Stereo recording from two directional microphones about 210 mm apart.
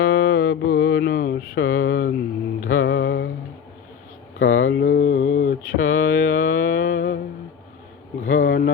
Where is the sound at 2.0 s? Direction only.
45° left (ahead or behind).